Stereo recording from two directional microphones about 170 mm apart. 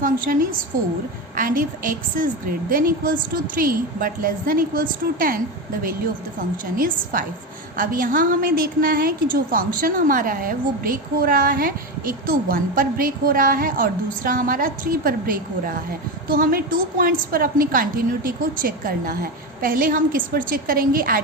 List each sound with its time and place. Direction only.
0.0 s a sound: 55° right (ahead or behind)
1.4 s a woman's voice: 55° right (ahead or behind)
6.7 s a woman's voice: 55° right (ahead or behind)